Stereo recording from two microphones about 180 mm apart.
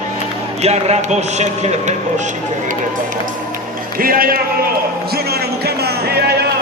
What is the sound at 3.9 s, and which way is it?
Speech, 55° right (ahead or behind).